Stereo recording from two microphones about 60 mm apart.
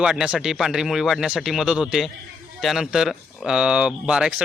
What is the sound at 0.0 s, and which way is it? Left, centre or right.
Speech, centre.